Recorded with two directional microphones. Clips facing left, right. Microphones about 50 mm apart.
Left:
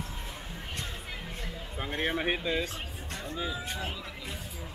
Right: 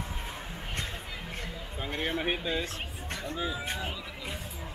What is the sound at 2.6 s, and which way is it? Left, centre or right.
Music, right.